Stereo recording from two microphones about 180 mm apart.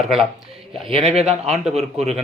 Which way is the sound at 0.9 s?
30° right (ahead or behind).